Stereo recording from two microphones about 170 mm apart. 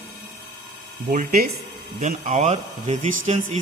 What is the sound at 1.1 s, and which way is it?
Speech, 50° right (ahead or behind).